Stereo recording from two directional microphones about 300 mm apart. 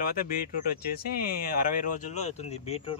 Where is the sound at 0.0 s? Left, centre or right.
Left.